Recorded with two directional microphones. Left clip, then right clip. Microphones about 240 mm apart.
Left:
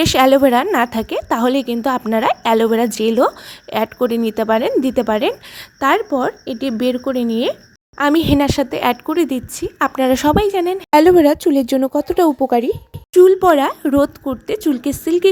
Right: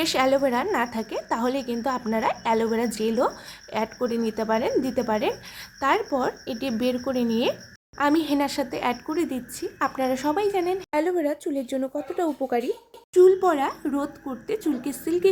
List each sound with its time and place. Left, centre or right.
0.0 s a woman's voice: left